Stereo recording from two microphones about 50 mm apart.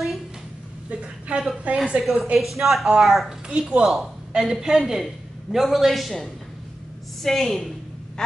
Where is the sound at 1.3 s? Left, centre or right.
Right.